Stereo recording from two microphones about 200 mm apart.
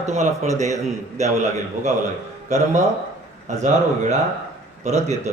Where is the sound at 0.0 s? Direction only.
35° right (ahead or behind).